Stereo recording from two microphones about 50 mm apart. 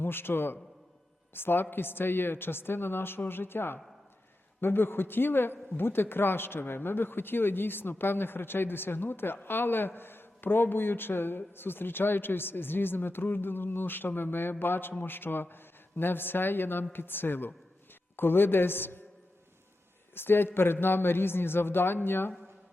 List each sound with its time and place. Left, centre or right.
0.0 s speech: left
20.1 s speech: left